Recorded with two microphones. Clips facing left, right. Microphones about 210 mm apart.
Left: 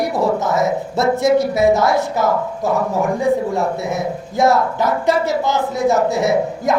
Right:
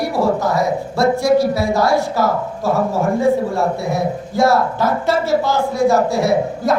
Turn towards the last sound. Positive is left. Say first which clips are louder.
# right 1 dB
turn(degrees=20)  # may be behind; listen again after turning